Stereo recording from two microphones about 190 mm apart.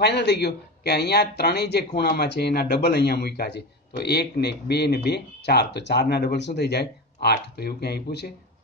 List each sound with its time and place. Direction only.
0.0 s speech: 65° left (ahead or behind)